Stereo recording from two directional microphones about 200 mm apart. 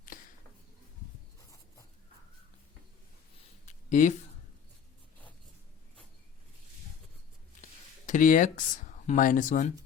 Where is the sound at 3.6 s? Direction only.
40° left (ahead or behind).